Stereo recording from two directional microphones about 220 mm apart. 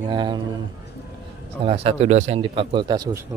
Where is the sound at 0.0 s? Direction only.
20° right (ahead or behind).